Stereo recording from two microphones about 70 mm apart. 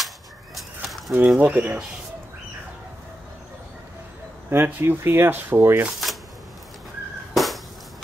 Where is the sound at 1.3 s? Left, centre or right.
Right.